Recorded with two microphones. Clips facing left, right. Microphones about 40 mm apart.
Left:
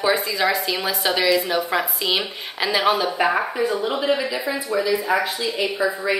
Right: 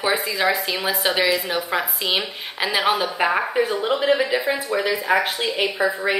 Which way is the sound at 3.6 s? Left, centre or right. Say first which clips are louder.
Right 1 dB; right.